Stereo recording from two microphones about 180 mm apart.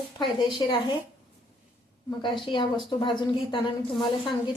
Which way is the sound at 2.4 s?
25° left (ahead or behind).